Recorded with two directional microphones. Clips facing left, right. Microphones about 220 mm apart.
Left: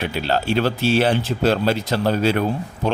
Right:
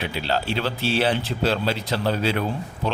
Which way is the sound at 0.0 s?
45° left (ahead or behind).